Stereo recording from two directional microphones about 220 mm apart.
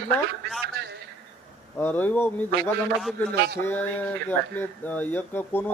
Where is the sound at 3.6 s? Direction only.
10° left (ahead or behind).